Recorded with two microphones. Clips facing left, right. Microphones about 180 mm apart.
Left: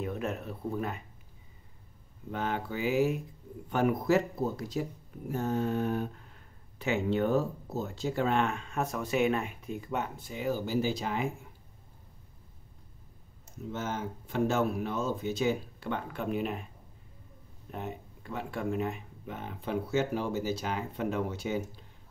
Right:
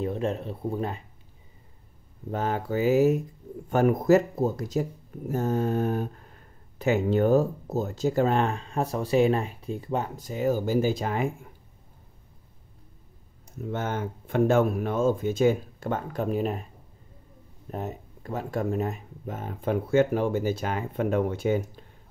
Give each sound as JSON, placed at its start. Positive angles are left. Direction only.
{"t": 0.0, "sound": "speech", "side_deg": -30}
{"t": 2.3, "sound": "speech", "side_deg": -40}
{"t": 13.7, "sound": "speech", "side_deg": -60}
{"t": 17.6, "sound": "speech", "side_deg": -40}